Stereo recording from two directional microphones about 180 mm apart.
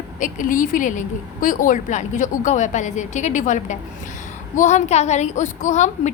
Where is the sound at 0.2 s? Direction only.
50° left (ahead or behind).